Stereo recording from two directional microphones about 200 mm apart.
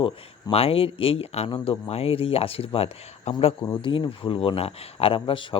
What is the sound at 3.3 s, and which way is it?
Speech, 20° left (ahead or behind).